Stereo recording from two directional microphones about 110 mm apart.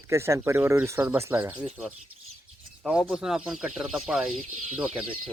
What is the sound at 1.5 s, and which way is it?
Speech, 10° right (ahead or behind).